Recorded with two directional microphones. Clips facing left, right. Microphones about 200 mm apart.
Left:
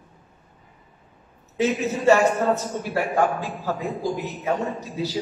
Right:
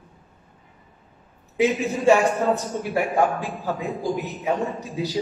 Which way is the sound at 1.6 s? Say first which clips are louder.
Right 1 dB; 15° right (ahead or behind).